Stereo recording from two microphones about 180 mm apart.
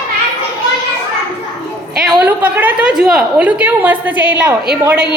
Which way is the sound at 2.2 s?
10° right (ahead or behind).